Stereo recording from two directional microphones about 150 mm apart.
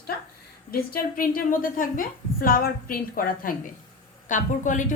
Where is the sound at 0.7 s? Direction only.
70° left (ahead or behind).